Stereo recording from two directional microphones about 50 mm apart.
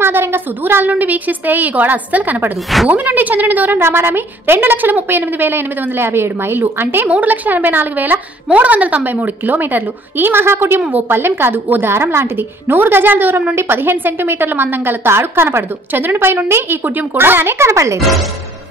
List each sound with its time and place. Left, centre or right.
0.0 s a woman's voice: right
3.8 s a woman's voice: right
7.1 s a woman's voice: right
17.6 s speech: right